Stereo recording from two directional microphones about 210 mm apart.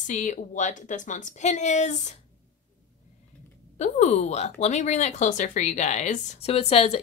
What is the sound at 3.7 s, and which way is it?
A woman's voice, 35° left (ahead or behind).